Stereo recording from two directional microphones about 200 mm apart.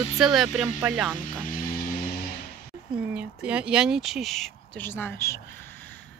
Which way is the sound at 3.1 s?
5° right (ahead or behind).